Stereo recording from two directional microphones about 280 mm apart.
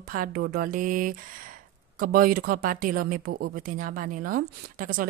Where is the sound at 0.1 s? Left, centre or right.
Right.